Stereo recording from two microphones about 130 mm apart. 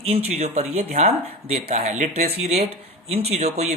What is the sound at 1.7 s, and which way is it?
Speech, 65° right (ahead or behind).